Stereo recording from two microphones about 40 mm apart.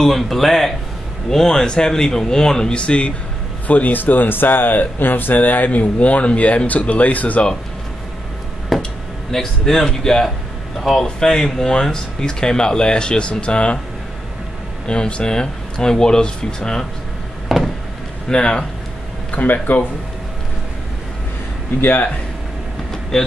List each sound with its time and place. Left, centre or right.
0.0 s speech: centre
2.8 s speech: left
3.6 s speech: left
8.7 s a sound: centre
9.3 s speech: centre
11.1 s speech: centre
14.9 s speech: left
17.5 s vehicle: centre
18.3 s speech: left
19.3 s speech: left
21.8 s speech: left